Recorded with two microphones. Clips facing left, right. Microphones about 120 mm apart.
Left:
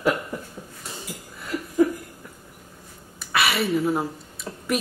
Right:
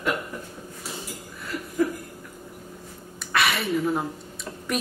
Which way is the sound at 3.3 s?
5° left (ahead or behind).